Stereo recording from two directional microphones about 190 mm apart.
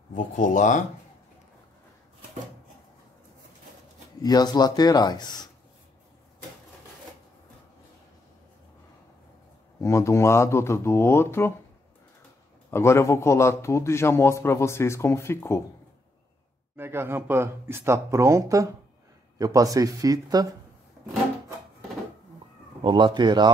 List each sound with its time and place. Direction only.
0.1 s speech: 40° left (ahead or behind)
4.2 s speech: 20° left (ahead or behind)
9.8 s a man's voice: 15° left (ahead or behind)
12.7 s a man's voice: 15° left (ahead or behind)
16.7 s speech: 10° right (ahead or behind)
22.8 s speech: 25° right (ahead or behind)